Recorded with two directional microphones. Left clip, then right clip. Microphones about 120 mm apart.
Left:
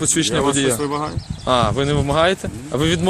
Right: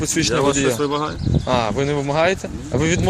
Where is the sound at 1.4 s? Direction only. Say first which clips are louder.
Left 3 dB; 35° left (ahead or behind).